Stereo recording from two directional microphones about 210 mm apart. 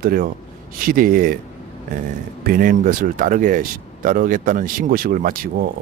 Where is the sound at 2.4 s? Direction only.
40° right (ahead or behind).